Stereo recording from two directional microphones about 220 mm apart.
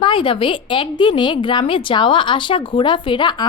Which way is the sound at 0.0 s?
25° left (ahead or behind).